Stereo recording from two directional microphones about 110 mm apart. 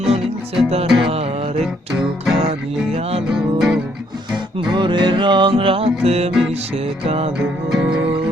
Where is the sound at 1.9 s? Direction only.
5° right (ahead or behind).